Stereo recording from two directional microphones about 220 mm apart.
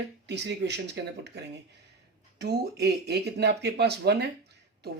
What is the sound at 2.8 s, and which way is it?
Speech, 50° right (ahead or behind).